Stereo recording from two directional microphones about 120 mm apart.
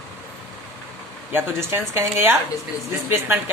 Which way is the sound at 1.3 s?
20° right (ahead or behind).